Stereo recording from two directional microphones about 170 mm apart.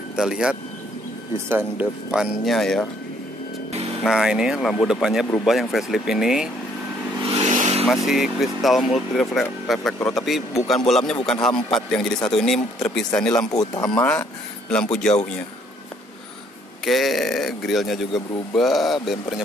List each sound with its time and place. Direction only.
0.1 s speech: 5° right (ahead or behind)
4.0 s speech: centre (ahead or behind)
7.2 s vehicle: 40° right (ahead or behind)
7.8 s speech: centre (ahead or behind)
13.5 s speech: 20° left (ahead or behind)
14.7 s speech: 5° left (ahead or behind)
16.8 s speech: centre (ahead or behind)